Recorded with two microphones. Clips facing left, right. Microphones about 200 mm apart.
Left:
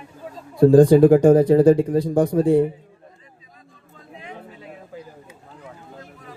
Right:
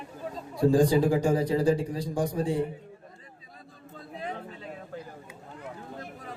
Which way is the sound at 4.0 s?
35° right (ahead or behind).